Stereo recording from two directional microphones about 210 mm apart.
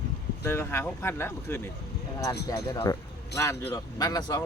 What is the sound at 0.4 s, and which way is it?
A man's voice, 10° left (ahead or behind).